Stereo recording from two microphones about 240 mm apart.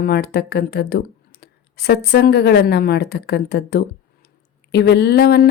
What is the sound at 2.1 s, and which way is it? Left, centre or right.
Speech, left.